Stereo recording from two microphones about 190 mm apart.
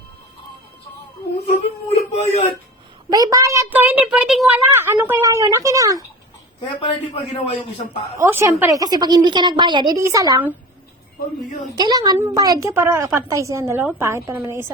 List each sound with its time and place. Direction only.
1.5 s speech: 35° left (ahead or behind)
3.1 s a woman's voice: 20° right (ahead or behind)
6.6 s speech: 30° left (ahead or behind)
8.2 s a woman's voice: 15° right (ahead or behind)
11.8 s a woman's voice: 20° right (ahead or behind)